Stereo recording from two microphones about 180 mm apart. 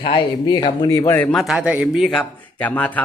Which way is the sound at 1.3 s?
Centre (ahead or behind).